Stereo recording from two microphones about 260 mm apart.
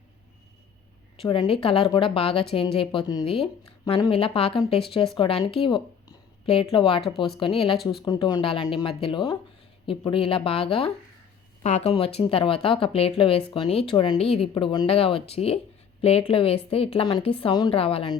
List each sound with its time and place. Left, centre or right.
1.2 s speech: centre